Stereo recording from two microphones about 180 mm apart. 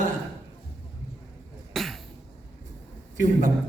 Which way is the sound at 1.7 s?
Centre (ahead or behind).